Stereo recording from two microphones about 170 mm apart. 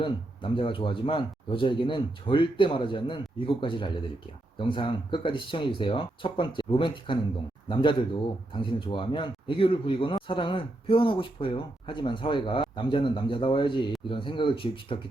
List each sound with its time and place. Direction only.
0.0 s speech: 30° left (ahead or behind)